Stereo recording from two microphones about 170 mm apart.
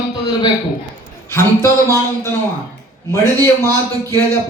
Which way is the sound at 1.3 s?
15° left (ahead or behind).